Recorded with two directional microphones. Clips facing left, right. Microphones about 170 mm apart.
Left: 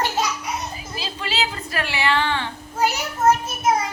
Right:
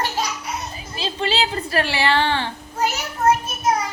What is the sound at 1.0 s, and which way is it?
A woman's voice, 30° right (ahead or behind).